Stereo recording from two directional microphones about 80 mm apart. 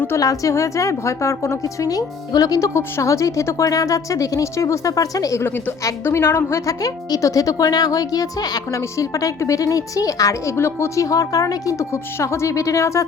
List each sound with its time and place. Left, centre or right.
0.2 s a woman's voice: left
5.8 s a woman's voice: left